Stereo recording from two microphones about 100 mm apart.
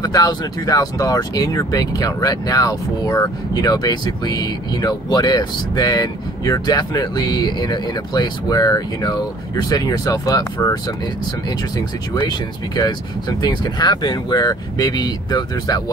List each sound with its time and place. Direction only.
0.0 s speech: 40° left (ahead or behind)
12.1 s speech: 45° left (ahead or behind)